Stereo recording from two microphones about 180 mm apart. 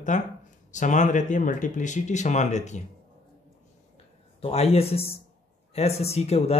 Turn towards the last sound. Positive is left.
turn(degrees=35)  # may be behind; listen again after turning